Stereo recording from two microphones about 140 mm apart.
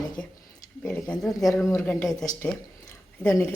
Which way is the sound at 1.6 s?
20° left (ahead or behind).